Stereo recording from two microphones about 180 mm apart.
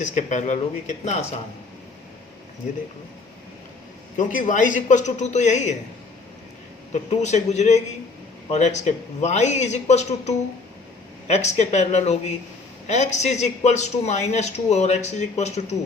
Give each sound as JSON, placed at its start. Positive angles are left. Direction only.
{"t": 0.0, "sound": "speech", "side_deg": 40}
{"t": 4.2, "sound": "speech", "side_deg": 45}
{"t": 6.9, "sound": "speech", "side_deg": 40}